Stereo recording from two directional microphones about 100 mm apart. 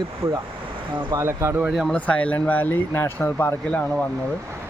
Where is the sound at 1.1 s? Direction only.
30° right (ahead or behind).